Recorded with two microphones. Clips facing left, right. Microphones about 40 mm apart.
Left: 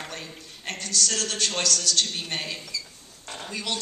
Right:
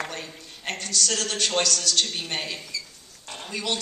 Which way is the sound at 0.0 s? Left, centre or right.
Centre.